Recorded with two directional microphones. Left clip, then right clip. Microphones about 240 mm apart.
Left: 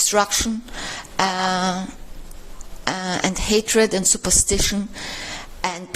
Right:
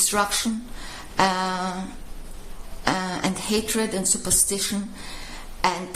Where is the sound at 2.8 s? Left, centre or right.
Left.